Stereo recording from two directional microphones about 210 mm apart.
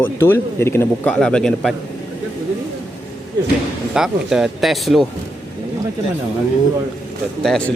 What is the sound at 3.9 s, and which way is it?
Speech, centre (ahead or behind).